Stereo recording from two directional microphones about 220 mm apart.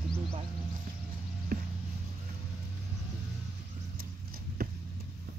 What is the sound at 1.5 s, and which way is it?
Music, 40° right (ahead or behind).